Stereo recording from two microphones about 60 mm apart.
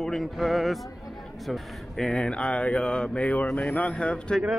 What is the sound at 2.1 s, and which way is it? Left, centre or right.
Speech, centre.